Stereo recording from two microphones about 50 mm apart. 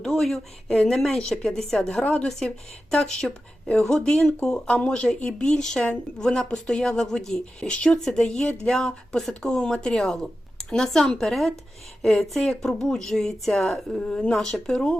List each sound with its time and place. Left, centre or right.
0.0 s speech: centre; by 7.9 s left
8.0 s speech: centre